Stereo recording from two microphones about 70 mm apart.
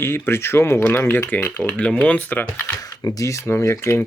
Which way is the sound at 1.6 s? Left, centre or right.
Centre.